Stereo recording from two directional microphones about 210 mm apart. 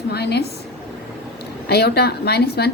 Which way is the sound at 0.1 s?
50° left (ahead or behind).